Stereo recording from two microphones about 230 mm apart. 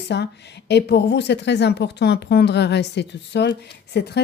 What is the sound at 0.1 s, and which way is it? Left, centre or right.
Speech, left.